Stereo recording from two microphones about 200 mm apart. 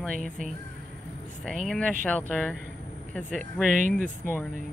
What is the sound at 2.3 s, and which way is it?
Speech, 5° left (ahead or behind).